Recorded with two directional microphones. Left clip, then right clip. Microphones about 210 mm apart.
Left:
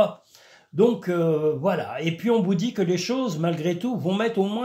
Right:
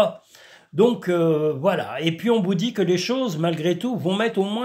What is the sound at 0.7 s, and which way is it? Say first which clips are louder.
Speech: right 2 dB; 30° right (ahead or behind).